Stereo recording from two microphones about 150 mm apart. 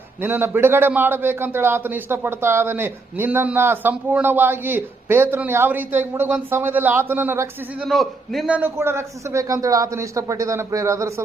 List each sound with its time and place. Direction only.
0.2 s a man's voice: 15° right (ahead or behind)
7.9 s a man's voice: centre (ahead or behind); by 11.1 s 20° right (ahead or behind)